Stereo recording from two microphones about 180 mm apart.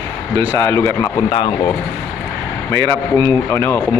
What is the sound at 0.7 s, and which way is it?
Speech, 15° left (ahead or behind).